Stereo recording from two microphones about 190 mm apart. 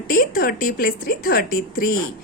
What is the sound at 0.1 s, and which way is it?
A woman's voice, 45° left (ahead or behind).